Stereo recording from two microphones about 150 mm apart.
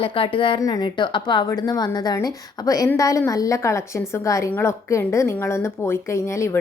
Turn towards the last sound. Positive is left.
turn(degrees=15)  # may be behind; listen again after turning